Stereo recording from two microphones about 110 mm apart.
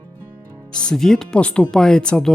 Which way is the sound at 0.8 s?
5° left (ahead or behind).